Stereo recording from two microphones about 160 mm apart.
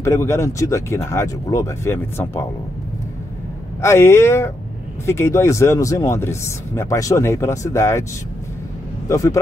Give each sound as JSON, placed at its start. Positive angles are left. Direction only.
{"t": 0.0, "sound": "speech", "side_deg": 15}
{"t": 3.8, "sound": "speech", "side_deg": 15}
{"t": 9.1, "sound": "speech", "side_deg": 20}